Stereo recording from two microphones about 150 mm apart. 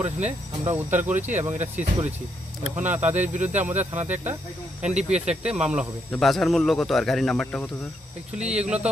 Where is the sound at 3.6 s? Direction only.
10° right (ahead or behind).